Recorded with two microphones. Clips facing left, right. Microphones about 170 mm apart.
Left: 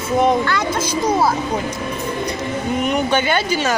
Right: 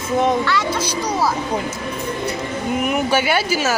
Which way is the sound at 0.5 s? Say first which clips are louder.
Left 1 dB; 50° left (ahead or behind).